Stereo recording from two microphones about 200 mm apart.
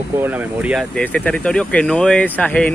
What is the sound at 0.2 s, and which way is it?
Speech, 10° right (ahead or behind).